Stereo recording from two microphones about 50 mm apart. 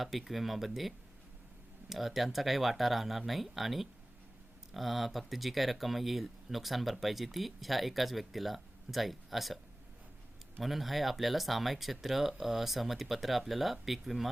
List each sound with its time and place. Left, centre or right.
0.0 s speech: centre
10.6 s speech: centre